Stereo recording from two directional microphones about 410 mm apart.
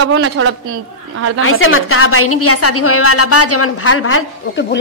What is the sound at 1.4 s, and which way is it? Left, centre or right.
A woman's voice, left.